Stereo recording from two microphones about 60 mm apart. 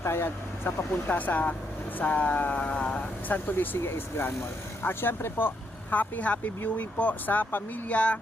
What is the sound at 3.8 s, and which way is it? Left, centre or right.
Speech, left.